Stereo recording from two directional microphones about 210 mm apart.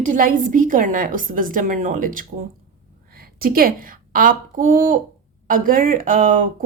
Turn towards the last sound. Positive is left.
turn(degrees=-40)  # may be behind; listen again after turning